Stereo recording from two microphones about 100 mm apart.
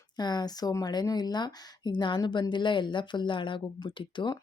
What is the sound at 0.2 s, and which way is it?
Speech, 45° left (ahead or behind).